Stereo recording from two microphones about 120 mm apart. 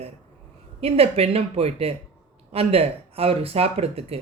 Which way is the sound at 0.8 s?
55° right (ahead or behind).